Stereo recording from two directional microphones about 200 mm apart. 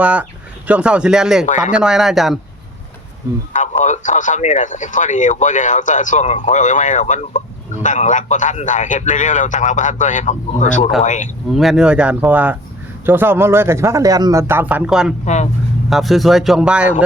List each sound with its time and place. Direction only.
0.0 s a man's voice: 5° right (ahead or behind)
1.5 s speech: 35° left (ahead or behind)
1.7 s speech: 5° right (ahead or behind)
3.5 s speech: 35° left (ahead or behind)
11.5 s a man's voice: centre (ahead or behind)
15.2 s speech: 35° left (ahead or behind)
15.9 s speech: centre (ahead or behind)